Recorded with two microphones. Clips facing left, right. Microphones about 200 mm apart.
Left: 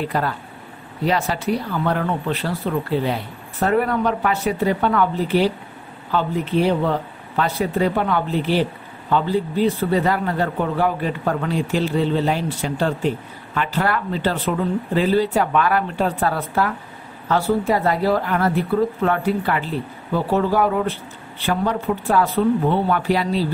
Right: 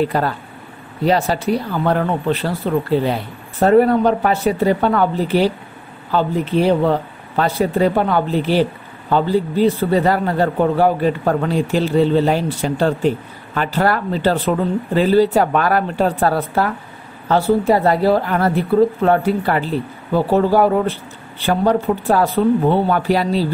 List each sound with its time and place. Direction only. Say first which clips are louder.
0.1 s speech: right 3 dB; 35° right (ahead or behind)